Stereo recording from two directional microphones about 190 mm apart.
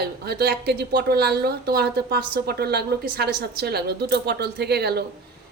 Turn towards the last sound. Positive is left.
turn(degrees=-60)  # may be behind; listen again after turning